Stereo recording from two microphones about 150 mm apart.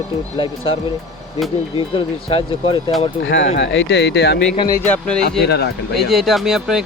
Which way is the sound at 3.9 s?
90° left.